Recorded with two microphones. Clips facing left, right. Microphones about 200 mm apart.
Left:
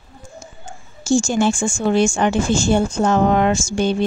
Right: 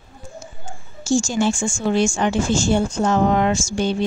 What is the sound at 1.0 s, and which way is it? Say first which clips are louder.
Speech: left 2 dB; 60° left (ahead or behind).